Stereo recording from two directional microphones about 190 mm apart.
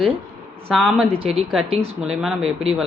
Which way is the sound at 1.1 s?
30° right (ahead or behind).